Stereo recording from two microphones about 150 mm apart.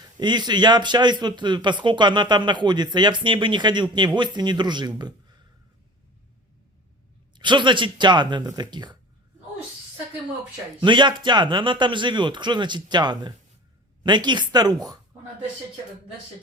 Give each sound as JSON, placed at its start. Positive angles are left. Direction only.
{"t": 0.0, "sound": "speech", "side_deg": -30}
{"t": 7.3, "sound": "speech", "side_deg": -30}
{"t": 10.8, "sound": "speech", "side_deg": -30}